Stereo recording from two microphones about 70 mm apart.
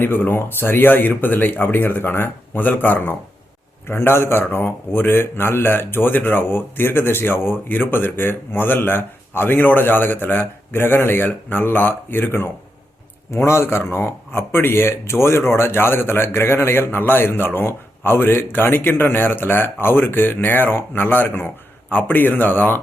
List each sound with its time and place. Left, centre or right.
0.0 s speech: left